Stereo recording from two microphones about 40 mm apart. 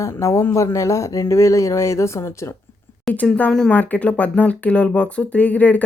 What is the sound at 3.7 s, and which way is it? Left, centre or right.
Speech, left.